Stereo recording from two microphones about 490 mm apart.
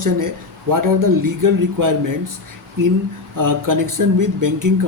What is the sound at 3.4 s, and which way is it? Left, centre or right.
Speech, right.